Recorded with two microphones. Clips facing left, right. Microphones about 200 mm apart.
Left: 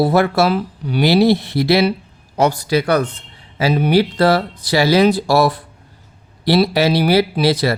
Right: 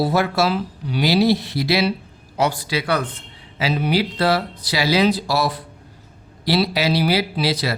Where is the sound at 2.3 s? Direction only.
45° left (ahead or behind).